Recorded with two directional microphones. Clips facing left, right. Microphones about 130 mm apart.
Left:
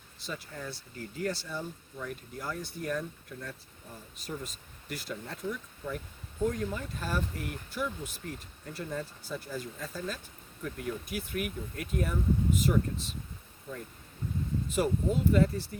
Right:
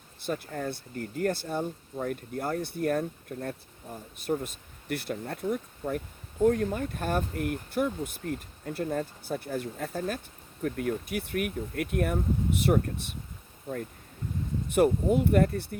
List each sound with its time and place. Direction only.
0.2 s speech: 55° right (ahead or behind)
14.7 s speech: 60° right (ahead or behind)